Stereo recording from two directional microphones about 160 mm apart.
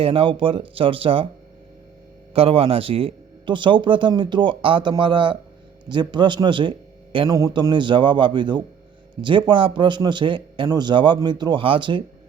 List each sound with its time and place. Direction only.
0.0 s speech: 35° right (ahead or behind)
2.3 s a man's voice: 35° right (ahead or behind)